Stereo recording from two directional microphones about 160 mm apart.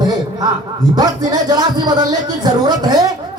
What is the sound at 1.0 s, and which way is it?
Speech, 25° right (ahead or behind).